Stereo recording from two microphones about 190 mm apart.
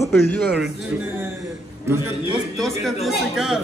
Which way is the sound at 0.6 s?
10° right (ahead or behind).